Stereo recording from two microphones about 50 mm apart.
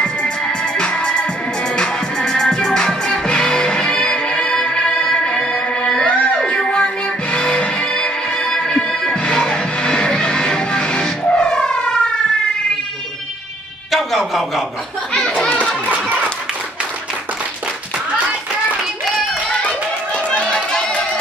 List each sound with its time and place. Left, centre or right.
0.0 s music: centre
13.9 s a sound: centre
15.2 s music: centre
20.2 s run: centre